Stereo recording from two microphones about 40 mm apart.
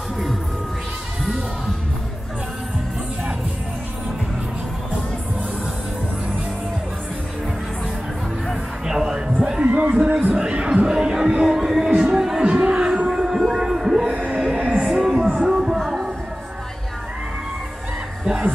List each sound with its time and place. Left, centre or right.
8.8 s music: centre
9.4 s music: right
10.3 s a sound: right
10.9 s music: centre
11.9 s music: right
12.2 s music: centre
12.4 s a sound: right
13.1 s music: centre
13.5 s a sound: centre
13.7 s music: centre
14.1 s music: right
14.4 s music: right
15.0 s music: centre
18.2 s fowl: centre